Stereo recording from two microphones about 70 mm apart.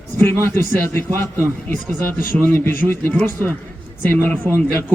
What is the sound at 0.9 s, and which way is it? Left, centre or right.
Speech, left.